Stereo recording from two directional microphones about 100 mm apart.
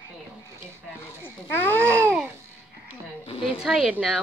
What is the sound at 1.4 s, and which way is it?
Speech, 20° left (ahead or behind).